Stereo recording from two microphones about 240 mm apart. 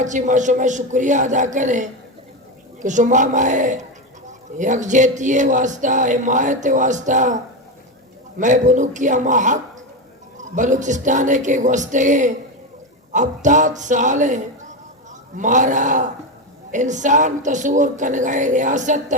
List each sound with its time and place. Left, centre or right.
0.0 s speech: right